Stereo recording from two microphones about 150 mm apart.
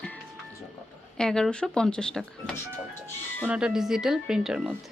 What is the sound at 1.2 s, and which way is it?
Speech, 5° left (ahead or behind).